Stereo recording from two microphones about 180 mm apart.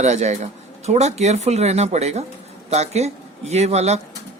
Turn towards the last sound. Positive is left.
turn(degrees=-35)  # may be behind; listen again after turning